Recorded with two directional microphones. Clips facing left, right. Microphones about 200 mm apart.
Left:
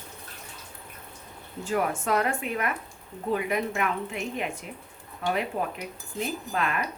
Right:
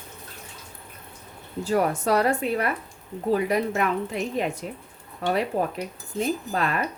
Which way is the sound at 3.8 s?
35° right (ahead or behind).